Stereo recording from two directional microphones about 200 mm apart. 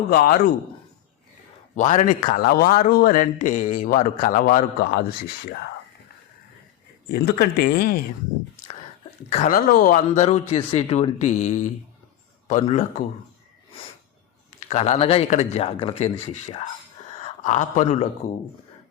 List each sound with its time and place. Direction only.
0.1 s a man's voice: 50° left (ahead or behind)
1.7 s a man's voice: 35° left (ahead or behind)
7.1 s a man's voice: 50° left (ahead or behind)
9.3 s speech: 40° left (ahead or behind)
14.7 s speech: 35° left (ahead or behind)